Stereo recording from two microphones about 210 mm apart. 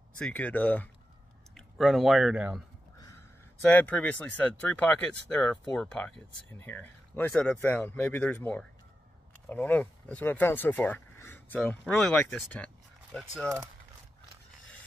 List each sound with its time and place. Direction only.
0.2 s speech: 5° left (ahead or behind)
3.0 s speech: 15° left (ahead or behind)